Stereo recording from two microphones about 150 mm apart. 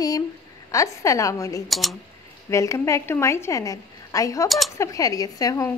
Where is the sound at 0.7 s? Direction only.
20° left (ahead or behind).